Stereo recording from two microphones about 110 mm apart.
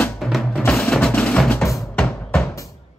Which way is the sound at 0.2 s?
Centre (ahead or behind).